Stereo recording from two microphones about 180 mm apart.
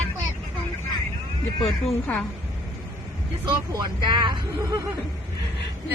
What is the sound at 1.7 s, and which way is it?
Speech, centre (ahead or behind).